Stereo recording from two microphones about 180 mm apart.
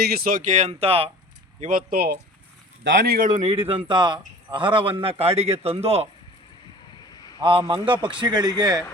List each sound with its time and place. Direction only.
0.0 s a man's voice: 60° right (ahead or behind); by 1.1 s 30° right (ahead or behind)
1.6 s a man's voice: 50° right (ahead or behind); by 6.1 s 35° right (ahead or behind)
7.1 s a sound: 20° left (ahead or behind)
7.3 s speech: 25° right (ahead or behind)